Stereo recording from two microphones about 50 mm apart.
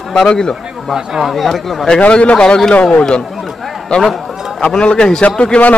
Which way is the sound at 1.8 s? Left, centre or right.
Left.